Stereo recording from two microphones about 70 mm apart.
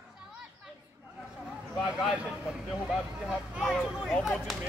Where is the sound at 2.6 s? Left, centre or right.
Centre.